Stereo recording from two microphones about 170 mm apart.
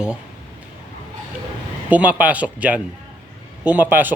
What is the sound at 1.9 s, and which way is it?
Speech, 10° right (ahead or behind).